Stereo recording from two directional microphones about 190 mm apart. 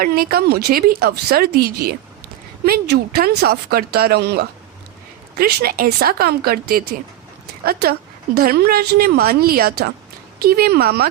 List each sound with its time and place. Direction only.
0.0 s speech: 50° right (ahead or behind)